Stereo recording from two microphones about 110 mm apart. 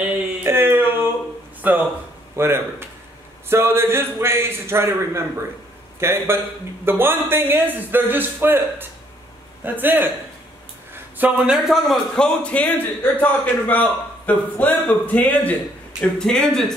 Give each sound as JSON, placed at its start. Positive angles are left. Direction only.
{"t": 0.4, "sound": "a sound", "side_deg": -20}
{"t": 5.9, "sound": "a man's voice", "side_deg": -20}
{"t": 11.1, "sound": "a man's voice", "side_deg": -15}
{"t": 11.5, "sound": "a man's voice", "side_deg": 0}
{"t": 12.4, "sound": "a man's voice", "side_deg": 15}